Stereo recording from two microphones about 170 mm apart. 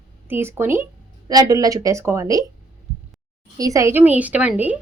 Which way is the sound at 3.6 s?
20° right (ahead or behind).